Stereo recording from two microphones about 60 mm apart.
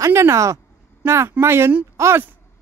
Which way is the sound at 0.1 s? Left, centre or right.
Right.